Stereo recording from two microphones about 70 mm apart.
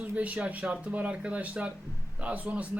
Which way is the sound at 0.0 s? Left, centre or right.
Right.